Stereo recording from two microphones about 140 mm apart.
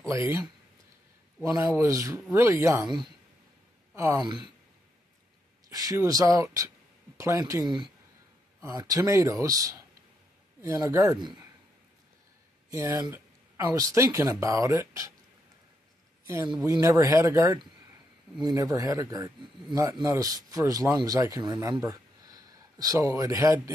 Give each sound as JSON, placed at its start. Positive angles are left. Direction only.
{"t": 0.1, "sound": "speech", "side_deg": -20}
{"t": 3.9, "sound": "speech", "side_deg": -20}
{"t": 5.7, "sound": "speech", "side_deg": -25}
{"t": 12.7, "sound": "speech", "side_deg": -25}
{"t": 16.8, "sound": "speech", "side_deg": -20}